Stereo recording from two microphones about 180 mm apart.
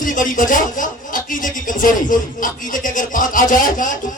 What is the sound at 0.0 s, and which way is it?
Speech, 50° left (ahead or behind).